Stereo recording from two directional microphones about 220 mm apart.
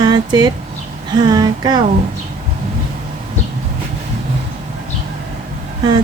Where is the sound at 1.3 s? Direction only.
20° right (ahead or behind).